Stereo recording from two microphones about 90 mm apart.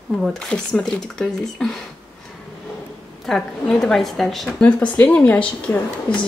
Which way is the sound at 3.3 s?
5° left (ahead or behind).